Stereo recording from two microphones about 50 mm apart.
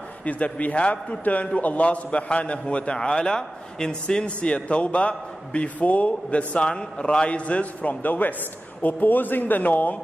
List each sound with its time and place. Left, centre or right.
0.2 s a man's voice: left